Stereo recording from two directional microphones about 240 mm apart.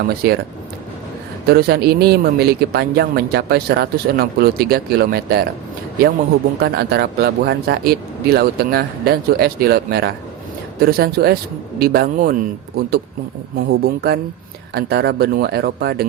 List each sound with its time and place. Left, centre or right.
0.1 s speech: right
1.5 s speech: right
6.6 s speech: right